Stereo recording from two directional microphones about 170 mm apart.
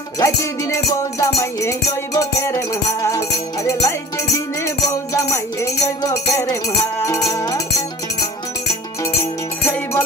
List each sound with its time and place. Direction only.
0.2 s music: 20° left (ahead or behind)
9.2 s music: 15° left (ahead or behind)